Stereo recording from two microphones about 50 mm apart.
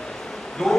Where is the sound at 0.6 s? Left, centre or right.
Centre.